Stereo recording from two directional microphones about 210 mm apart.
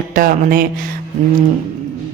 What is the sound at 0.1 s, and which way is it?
Speech, 40° right (ahead or behind).